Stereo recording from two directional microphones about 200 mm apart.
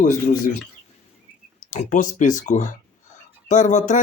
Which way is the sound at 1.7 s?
40° left (ahead or behind).